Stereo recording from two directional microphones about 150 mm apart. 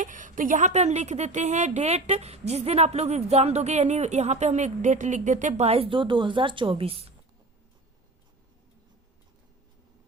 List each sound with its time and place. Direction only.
0.0 s a woman's voice: 60° right (ahead or behind); by 7.1 s 40° right (ahead or behind)